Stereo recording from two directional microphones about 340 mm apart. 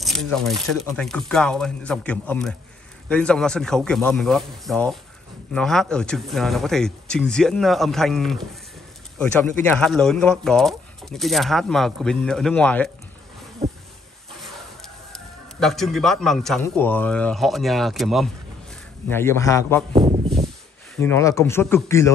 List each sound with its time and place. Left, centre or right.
0.0 s speech: centre
13.6 s a sound: centre
15.6 s speech: centre
19.9 s speech: centre
20.9 s speech: centre